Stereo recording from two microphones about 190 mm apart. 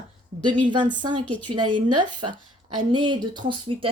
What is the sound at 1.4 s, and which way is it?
Speech, 25° right (ahead or behind).